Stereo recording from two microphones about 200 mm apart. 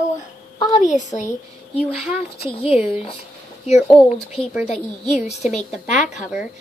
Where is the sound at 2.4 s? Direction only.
30° left (ahead or behind).